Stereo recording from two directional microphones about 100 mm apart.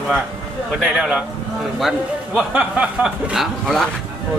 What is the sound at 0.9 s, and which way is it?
A man's voice, 5° right (ahead or behind).